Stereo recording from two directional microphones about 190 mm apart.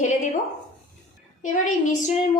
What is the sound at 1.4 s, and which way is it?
Speech, 40° left (ahead or behind).